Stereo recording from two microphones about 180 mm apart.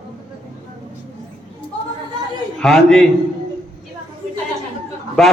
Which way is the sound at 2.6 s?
Centre (ahead or behind).